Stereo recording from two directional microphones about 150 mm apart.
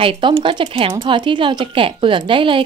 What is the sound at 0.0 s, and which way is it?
A woman's voice, 35° right (ahead or behind).